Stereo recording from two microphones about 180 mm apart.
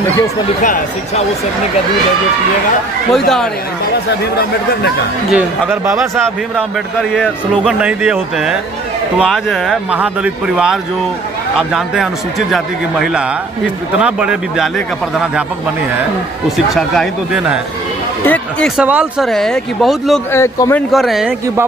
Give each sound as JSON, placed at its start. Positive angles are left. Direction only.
{"t": 3.1, "sound": "a man's voice", "side_deg": 0}
{"t": 5.3, "sound": "a man's voice", "side_deg": -5}
{"t": 16.7, "sound": "a man's voice", "side_deg": 0}
{"t": 18.2, "sound": "speech", "side_deg": 10}
{"t": 18.8, "sound": "a man's voice", "side_deg": -5}
{"t": 20.3, "sound": "a man's voice", "side_deg": 15}
{"t": 20.9, "sound": "a man's voice", "side_deg": 0}